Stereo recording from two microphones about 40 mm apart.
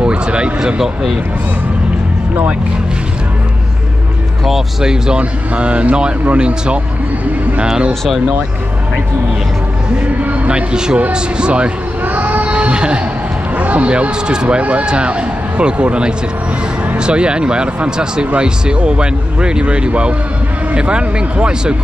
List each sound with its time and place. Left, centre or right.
0.0 s speech: right
4.5 s speech: centre
5.0 s speech: right
10.0 s a sound: right
10.5 s speech: right
12.1 s vehicle: right
12.5 s vehicle: right
13.6 s speech: right
14.6 s speech: right